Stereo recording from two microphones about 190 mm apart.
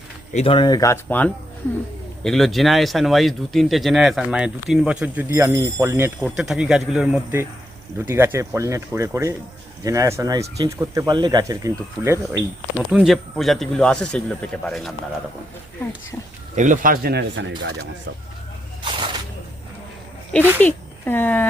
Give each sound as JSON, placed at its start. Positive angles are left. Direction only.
{"t": 0.3, "sound": "speech", "side_deg": 30}
{"t": 6.2, "sound": "speech", "side_deg": -5}
{"t": 12.9, "sound": "speech", "side_deg": 0}
{"t": 16.6, "sound": "speech", "side_deg": -45}
{"t": 18.8, "sound": "a sound", "side_deg": -25}
{"t": 20.6, "sound": "speech", "side_deg": 10}